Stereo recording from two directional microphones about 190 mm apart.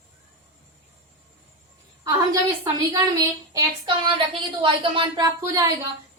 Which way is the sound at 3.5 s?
20° right (ahead or behind).